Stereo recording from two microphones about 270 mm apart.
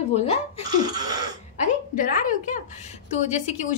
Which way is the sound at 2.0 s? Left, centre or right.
Left.